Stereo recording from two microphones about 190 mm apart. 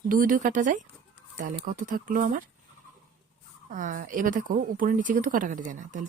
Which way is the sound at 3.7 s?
45° right (ahead or behind).